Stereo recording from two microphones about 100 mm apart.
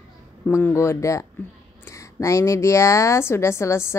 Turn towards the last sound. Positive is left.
turn(degrees=25)  # may be behind; listen again after turning